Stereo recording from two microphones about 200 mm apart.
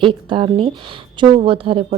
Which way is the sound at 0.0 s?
25° right (ahead or behind).